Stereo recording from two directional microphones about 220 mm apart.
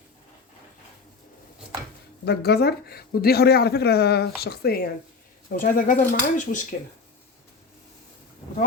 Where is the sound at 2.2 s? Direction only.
45° left (ahead or behind).